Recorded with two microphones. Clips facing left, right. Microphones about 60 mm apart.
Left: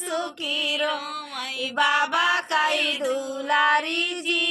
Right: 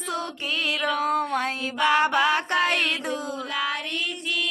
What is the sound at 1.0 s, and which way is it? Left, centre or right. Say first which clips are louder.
Music: right 9 dB; right.